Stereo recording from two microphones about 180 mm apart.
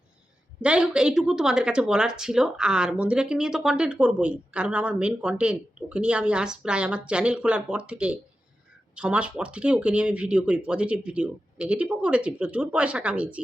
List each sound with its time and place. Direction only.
0.6 s speech: 5° right (ahead or behind)